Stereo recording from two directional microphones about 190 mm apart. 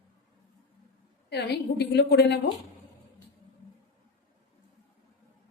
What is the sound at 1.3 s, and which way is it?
A woman's voice, 60° left (ahead or behind).